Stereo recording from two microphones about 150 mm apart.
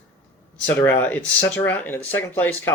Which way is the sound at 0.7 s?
10° left (ahead or behind).